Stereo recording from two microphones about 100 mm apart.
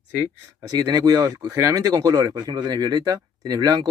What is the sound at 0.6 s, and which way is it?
Speech, 40° right (ahead or behind).